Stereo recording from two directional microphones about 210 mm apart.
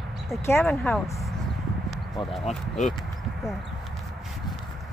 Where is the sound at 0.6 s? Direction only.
Centre (ahead or behind).